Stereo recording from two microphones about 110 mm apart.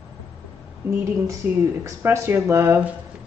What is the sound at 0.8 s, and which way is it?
Speech, 30° right (ahead or behind).